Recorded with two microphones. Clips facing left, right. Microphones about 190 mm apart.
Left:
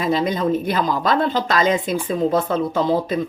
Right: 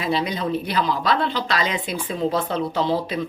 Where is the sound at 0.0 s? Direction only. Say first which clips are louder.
Left 4 dB; 45° left (ahead or behind).